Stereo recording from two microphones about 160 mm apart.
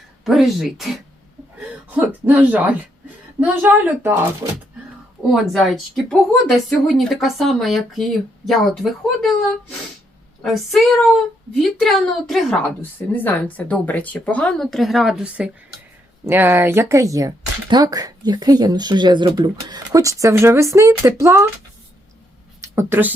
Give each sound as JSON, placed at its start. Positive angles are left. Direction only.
{"t": 0.3, "sound": "a woman's voice", "side_deg": 0}
{"t": 2.0, "sound": "a woman's voice", "side_deg": -10}
{"t": 5.3, "sound": "a woman's voice", "side_deg": 0}
{"t": 22.6, "sound": "a woman's voice", "side_deg": -15}